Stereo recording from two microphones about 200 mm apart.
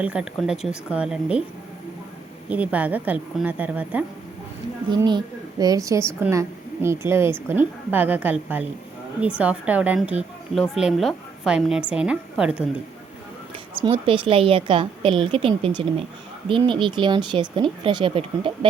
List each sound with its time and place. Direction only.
0.0 s a woman's voice: 5° right (ahead or behind)
2.5 s a woman's voice: 5° right (ahead or behind)
4.9 s a woman's voice: 20° right (ahead or behind); by 12.6 s 5° right (ahead or behind)
13.8 s speech: 25° right (ahead or behind)